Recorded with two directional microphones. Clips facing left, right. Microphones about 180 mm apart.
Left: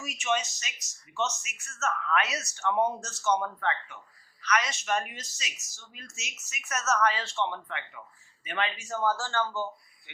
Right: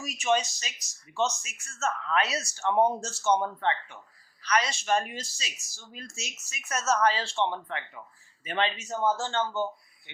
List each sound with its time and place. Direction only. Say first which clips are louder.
0.0 s a man's voice: right 4 dB; 35° right (ahead or behind); by 9.6 s 20° right (ahead or behind)